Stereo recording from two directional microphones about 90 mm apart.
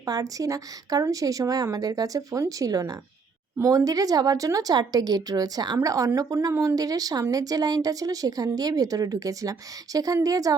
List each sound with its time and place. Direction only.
0.0 s a woman's voice: 45° right (ahead or behind)